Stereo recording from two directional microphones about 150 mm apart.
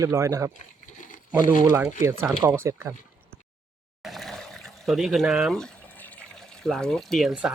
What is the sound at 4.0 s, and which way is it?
Water, centre (ahead or behind).